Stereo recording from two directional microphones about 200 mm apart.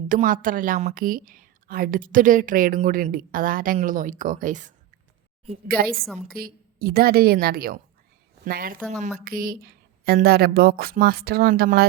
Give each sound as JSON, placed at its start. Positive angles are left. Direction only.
{"t": 0.1, "sound": "a woman's voice", "side_deg": -40}